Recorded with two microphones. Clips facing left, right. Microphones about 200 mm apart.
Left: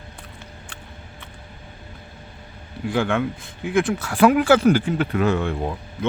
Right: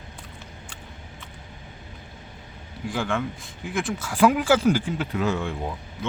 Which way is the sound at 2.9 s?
60° left (ahead or behind).